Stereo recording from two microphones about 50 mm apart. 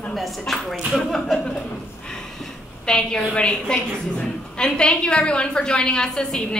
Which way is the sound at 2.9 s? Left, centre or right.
Centre.